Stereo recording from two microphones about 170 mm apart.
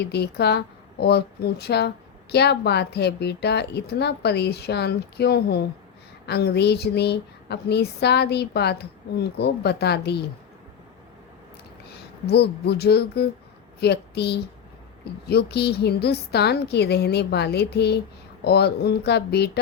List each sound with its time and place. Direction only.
0.0 s speech: 75° left (ahead or behind)
12.2 s a woman's voice: 70° left (ahead or behind)